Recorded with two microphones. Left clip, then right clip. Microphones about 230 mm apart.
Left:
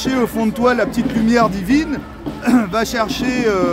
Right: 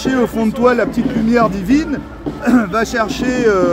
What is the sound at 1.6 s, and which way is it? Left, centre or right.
Speech, centre.